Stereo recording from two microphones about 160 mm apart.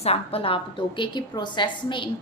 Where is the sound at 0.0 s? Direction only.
40° left (ahead or behind).